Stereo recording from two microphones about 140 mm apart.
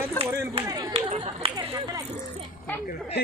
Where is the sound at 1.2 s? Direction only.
45° right (ahead or behind).